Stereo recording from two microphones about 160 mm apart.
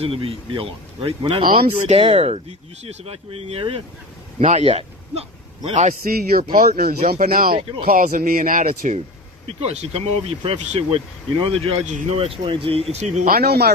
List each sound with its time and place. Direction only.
0.0 s speech: 35° right (ahead or behind)
6.0 s speech: 65° right (ahead or behind)
9.5 s speech: 40° right (ahead or behind)
13.0 s speech: 45° right (ahead or behind)
13.3 s speech: 80° right